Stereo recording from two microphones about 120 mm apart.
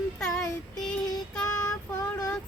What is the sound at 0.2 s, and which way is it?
Child singing, 5° left (ahead or behind).